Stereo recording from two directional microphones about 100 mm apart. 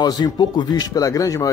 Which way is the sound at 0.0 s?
45° left (ahead or behind).